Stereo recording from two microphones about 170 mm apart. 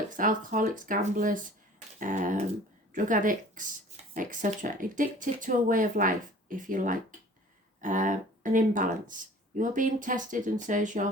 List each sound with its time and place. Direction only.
0.2 s speech: 50° right (ahead or behind)